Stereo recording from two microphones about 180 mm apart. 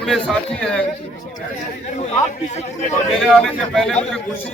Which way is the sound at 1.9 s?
40° left (ahead or behind).